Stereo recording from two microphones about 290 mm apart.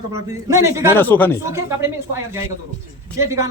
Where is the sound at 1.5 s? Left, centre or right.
Centre.